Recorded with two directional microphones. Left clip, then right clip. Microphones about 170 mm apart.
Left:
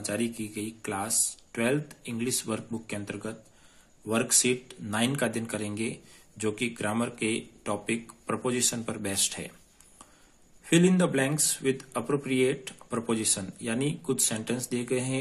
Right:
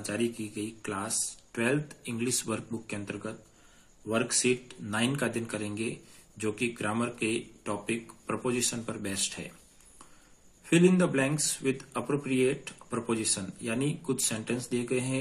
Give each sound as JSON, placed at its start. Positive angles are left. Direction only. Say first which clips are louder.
{"t": 0.0, "sound": "speech", "louder": "even", "side_deg": 20}
{"t": 10.6, "sound": "speech", "louder": "even", "side_deg": 25}